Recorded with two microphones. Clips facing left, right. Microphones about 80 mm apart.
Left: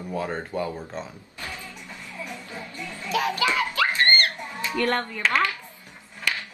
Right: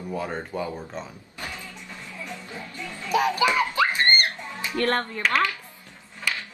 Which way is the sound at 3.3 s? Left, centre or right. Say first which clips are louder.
Right 2 dB; right.